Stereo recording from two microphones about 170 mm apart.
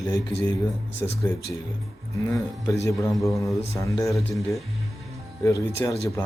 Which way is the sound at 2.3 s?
20° left (ahead or behind).